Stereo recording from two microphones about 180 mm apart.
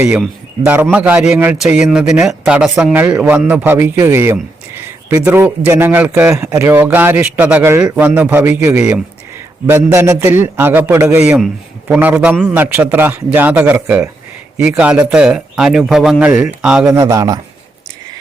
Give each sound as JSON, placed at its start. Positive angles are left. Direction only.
{"t": 0.0, "sound": "a man's voice", "side_deg": -5}
{"t": 16.8, "sound": "speech", "side_deg": -15}